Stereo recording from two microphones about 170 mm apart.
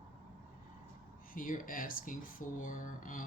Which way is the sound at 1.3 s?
55° left (ahead or behind).